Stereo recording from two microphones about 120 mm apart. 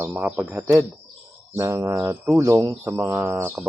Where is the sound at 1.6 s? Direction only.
25° right (ahead or behind).